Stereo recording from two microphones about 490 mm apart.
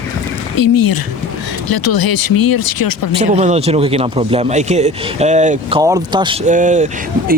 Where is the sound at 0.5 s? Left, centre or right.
Left.